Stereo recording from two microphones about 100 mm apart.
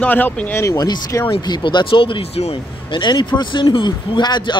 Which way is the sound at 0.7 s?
40° left (ahead or behind).